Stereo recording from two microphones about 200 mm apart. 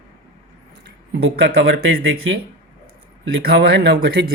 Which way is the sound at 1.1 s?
70° right (ahead or behind).